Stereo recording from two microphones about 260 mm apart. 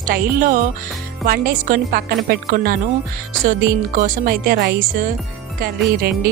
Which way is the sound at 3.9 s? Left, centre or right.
Right.